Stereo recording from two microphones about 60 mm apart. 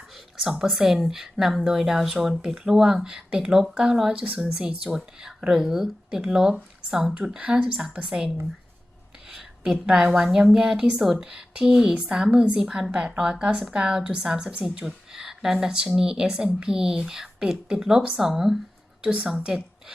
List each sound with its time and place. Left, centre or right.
0.6 s speech: centre
9.3 s a woman's voice: centre